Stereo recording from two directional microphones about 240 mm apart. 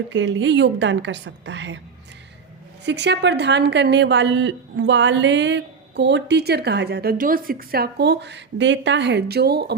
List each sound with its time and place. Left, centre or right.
0.1 s a woman's voice: right
2.8 s a woman's voice: right